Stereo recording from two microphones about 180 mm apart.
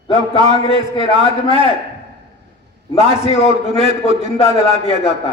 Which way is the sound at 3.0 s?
35° left (ahead or behind).